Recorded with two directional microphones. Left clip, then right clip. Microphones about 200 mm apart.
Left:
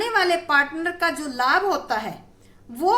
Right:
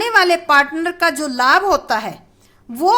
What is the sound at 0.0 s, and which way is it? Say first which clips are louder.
A woman's voice: right 7 dB; 40° right (ahead or behind).